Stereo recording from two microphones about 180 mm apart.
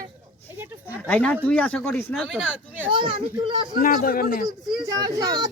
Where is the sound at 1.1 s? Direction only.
10° left (ahead or behind).